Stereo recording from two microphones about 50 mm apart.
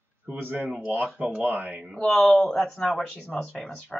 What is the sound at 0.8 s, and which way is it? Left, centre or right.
Speech, right.